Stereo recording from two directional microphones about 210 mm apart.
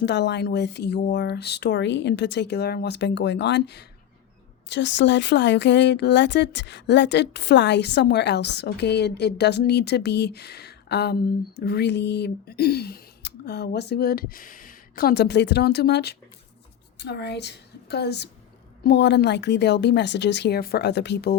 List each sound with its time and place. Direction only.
0.0 s a woman's voice: 55° left (ahead or behind)